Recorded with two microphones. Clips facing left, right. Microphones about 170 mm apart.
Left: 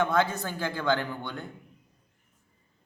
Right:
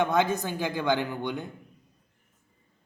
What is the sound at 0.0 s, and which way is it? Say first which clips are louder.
Speech: right 1 dB; 20° right (ahead or behind).